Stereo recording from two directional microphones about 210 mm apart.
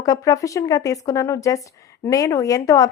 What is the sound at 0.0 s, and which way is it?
A woman's voice, 15° left (ahead or behind).